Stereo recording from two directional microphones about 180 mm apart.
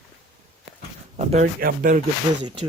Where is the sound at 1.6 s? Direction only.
50° right (ahead or behind).